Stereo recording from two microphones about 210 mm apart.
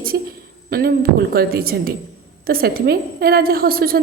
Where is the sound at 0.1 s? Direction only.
55° right (ahead or behind).